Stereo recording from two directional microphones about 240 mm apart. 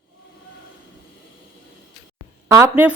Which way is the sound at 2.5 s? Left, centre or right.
Centre.